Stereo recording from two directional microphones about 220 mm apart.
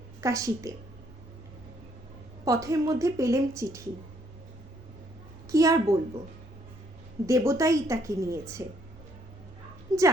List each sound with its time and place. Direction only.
0.2 s a woman's voice: 15° right (ahead or behind)
2.4 s a woman's voice: 15° right (ahead or behind)
5.5 s a woman's voice: 15° right (ahead or behind)
7.3 s a woman's voice: 15° right (ahead or behind)
9.9 s a woman's voice: 15° right (ahead or behind)